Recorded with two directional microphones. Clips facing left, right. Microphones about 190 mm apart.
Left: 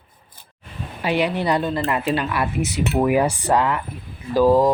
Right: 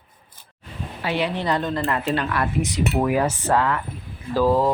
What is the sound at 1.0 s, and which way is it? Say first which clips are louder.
Speech: left 3 dB; 15° left (ahead or behind).